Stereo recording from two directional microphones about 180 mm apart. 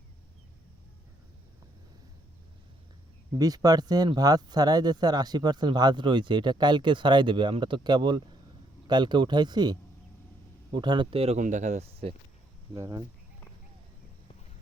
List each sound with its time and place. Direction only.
3.3 s speech: 20° right (ahead or behind)
12.7 s speech: 20° right (ahead or behind)